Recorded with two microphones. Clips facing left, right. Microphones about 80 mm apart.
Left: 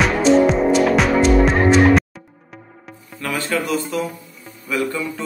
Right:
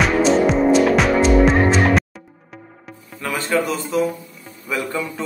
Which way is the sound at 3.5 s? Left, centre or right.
Right.